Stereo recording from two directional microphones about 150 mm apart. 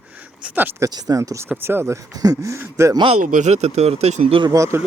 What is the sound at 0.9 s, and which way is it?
Speech, 25° right (ahead or behind).